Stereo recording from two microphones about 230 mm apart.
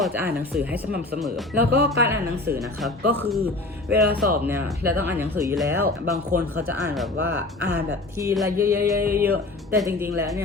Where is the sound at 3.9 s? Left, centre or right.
Right.